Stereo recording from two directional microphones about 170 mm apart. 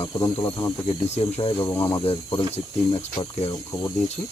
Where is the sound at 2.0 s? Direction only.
35° left (ahead or behind).